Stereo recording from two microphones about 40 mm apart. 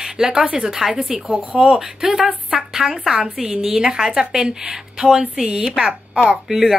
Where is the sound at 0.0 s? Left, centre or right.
Centre.